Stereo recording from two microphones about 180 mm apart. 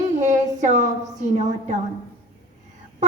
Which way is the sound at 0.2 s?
40° right (ahead or behind).